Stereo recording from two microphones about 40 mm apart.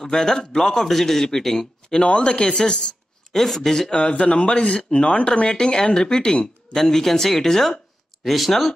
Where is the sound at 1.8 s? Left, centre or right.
Left.